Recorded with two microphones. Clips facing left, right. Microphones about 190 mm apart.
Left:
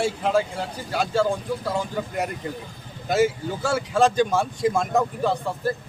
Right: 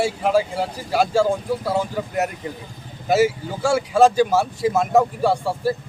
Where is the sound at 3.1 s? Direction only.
10° right (ahead or behind).